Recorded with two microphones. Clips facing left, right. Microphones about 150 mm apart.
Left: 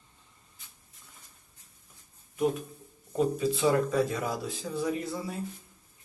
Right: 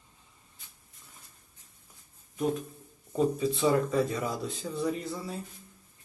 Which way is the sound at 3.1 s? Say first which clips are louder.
Even; centre (ahead or behind).